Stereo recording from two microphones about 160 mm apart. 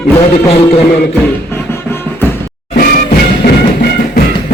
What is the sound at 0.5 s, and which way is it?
Music, 40° left (ahead or behind).